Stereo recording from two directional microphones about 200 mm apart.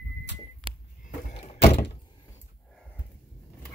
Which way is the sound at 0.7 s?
25° right (ahead or behind).